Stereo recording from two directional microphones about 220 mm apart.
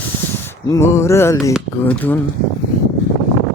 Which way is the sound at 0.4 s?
15° left (ahead or behind).